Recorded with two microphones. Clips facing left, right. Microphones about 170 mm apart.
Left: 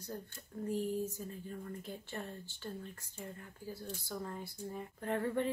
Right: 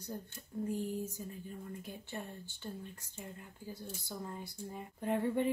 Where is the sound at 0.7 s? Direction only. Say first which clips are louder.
Left 3 dB; 15° right (ahead or behind).